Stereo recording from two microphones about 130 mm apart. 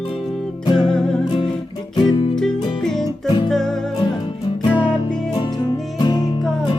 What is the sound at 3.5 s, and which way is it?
Music, 5° left (ahead or behind).